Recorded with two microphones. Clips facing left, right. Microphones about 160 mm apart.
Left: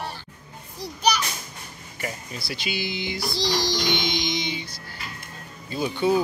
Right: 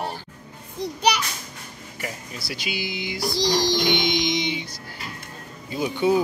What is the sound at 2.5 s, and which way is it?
Music, 10° right (ahead or behind).